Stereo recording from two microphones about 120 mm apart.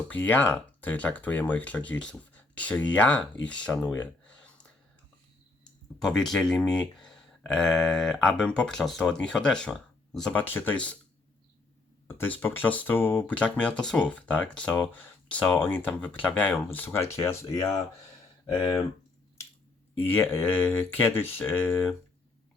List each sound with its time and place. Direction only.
0.1 s speech: 15° left (ahead or behind)
6.1 s speech: 5° left (ahead or behind)
12.0 s speech: 20° left (ahead or behind)
20.1 s speech: 20° left (ahead or behind)